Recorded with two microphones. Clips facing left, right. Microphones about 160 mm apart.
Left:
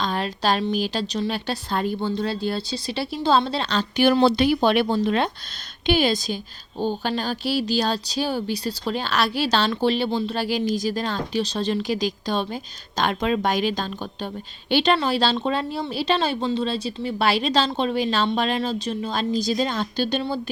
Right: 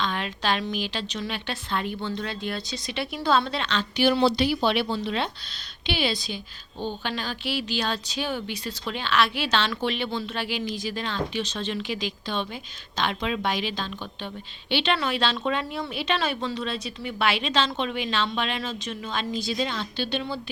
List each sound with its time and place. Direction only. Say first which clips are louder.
0.0 s a woman's voice: left 4 dB; 40° left (ahead or behind)